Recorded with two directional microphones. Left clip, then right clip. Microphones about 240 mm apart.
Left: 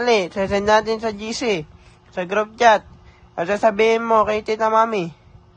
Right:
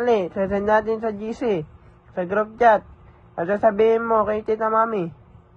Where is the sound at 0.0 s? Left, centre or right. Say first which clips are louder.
Left 2 dB; left.